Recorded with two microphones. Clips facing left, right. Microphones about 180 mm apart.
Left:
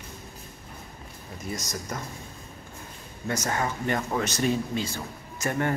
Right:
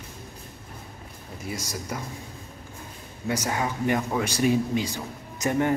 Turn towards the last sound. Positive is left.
turn(degrees=-15)  # may be behind; listen again after turning